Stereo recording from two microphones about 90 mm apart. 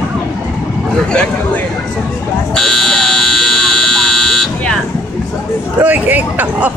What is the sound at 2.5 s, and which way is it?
Buzzer, 5° left (ahead or behind).